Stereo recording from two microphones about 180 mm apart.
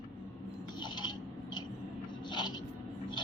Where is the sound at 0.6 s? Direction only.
25° left (ahead or behind).